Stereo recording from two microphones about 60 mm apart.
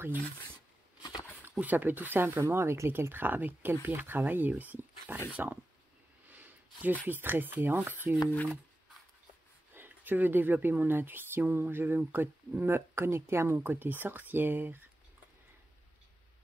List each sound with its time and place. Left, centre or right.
1.6 s speech: right
2.4 s speech: right
6.2 s a sound: right
7.1 s speech: right
9.8 s speech: right
13.6 s speech: right